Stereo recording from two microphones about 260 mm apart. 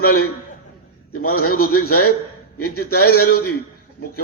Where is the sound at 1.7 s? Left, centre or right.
Left.